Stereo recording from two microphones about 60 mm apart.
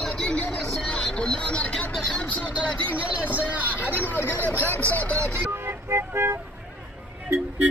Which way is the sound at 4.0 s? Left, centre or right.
Left.